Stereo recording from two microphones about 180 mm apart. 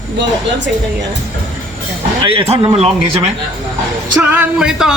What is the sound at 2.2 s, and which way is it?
A man's voice, 35° right (ahead or behind).